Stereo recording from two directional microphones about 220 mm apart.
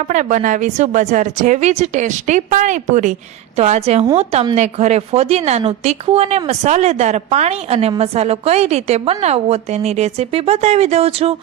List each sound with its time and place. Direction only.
0.1 s a woman's voice: 35° right (ahead or behind)